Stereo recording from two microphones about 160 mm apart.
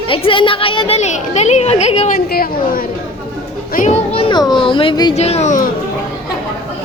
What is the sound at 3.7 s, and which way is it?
Speech, 55° left (ahead or behind).